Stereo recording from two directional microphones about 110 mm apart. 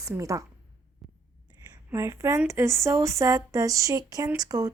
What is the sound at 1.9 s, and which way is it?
Speech, 25° right (ahead or behind).